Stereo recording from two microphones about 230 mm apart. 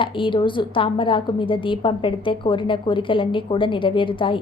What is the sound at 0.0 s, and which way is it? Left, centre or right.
A woman's voice, left.